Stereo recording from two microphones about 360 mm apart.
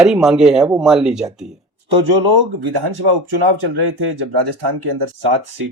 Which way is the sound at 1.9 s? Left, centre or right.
Right.